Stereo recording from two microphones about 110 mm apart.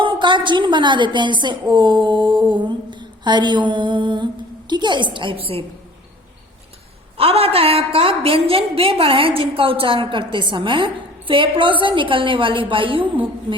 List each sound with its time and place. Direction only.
0.0 s a woman's voice: 45° right (ahead or behind)
7.2 s a woman's voice: 60° right (ahead or behind)